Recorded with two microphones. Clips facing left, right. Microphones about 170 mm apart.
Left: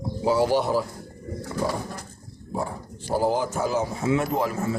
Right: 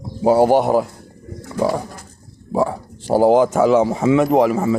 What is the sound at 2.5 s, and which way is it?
A man's voice, 90° right.